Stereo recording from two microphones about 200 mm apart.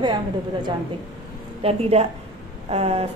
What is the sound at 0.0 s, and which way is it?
A woman's voice, 20° right (ahead or behind).